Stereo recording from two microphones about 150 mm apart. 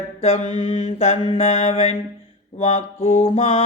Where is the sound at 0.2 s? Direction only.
45° left (ahead or behind).